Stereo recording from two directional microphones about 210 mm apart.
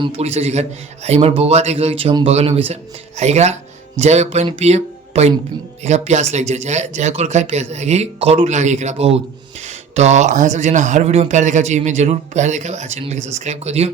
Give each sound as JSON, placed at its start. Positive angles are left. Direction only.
{"t": 0.0, "sound": "speech", "side_deg": -30}